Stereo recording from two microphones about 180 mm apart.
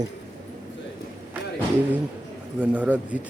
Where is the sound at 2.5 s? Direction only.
10° right (ahead or behind).